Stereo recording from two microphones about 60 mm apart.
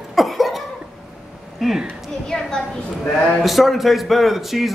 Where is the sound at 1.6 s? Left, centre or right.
Centre.